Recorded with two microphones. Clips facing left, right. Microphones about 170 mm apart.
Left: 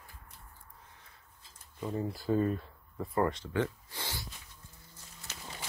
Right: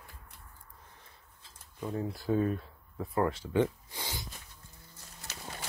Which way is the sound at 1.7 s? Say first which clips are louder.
Even; centre (ahead or behind).